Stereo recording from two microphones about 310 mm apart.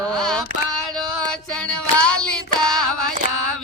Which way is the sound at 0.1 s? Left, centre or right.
Centre.